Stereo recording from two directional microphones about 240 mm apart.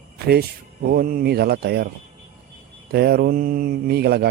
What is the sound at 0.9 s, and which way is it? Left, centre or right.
Speech, right.